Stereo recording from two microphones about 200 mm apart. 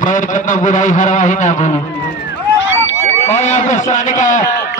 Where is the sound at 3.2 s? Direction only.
35° left (ahead or behind).